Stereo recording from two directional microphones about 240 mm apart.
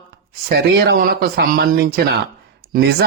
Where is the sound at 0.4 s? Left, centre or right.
Right.